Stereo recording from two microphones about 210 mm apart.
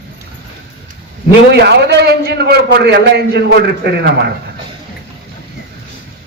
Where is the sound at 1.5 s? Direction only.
55° right (ahead or behind).